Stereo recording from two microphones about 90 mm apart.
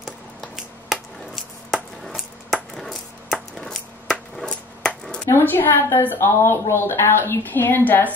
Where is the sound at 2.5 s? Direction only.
5° left (ahead or behind).